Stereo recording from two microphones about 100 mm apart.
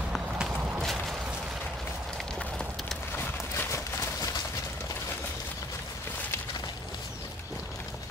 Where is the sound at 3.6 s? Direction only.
30° left (ahead or behind).